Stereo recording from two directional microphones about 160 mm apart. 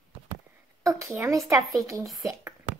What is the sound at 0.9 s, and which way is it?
Speech, 20° right (ahead or behind).